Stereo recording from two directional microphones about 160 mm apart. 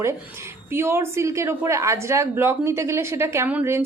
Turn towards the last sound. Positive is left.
turn(degrees=-15)  # may be behind; listen again after turning